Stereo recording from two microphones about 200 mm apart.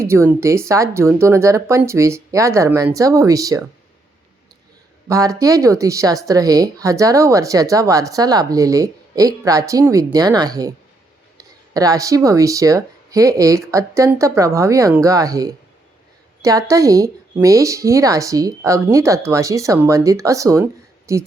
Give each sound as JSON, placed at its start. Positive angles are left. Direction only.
{"t": 0.0, "sound": "speech", "side_deg": -15}
{"t": 5.0, "sound": "speech", "side_deg": -15}